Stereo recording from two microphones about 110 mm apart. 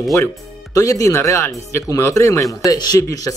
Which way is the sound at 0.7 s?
30° left (ahead or behind).